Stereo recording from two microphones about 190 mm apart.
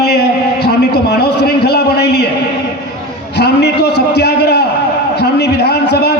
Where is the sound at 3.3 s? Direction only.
60° left (ahead or behind).